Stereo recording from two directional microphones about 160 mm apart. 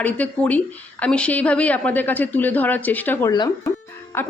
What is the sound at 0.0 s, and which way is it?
Speech, 10° left (ahead or behind).